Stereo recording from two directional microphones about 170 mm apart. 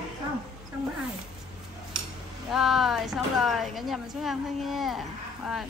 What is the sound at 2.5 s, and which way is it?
A woman's voice, centre (ahead or behind).